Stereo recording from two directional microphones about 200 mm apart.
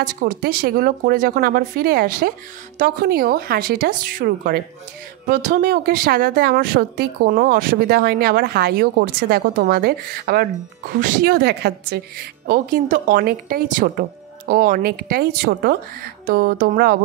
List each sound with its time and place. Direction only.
0.0 s speech: 45° right (ahead or behind)